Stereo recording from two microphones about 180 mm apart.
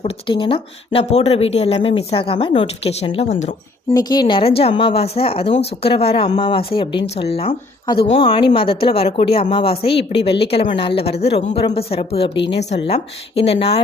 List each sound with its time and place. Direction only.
0.0 s speech: 30° left (ahead or behind)
3.9 s speech: 25° left (ahead or behind)